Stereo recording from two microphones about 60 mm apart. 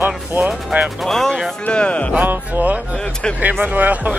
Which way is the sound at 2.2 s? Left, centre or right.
Right.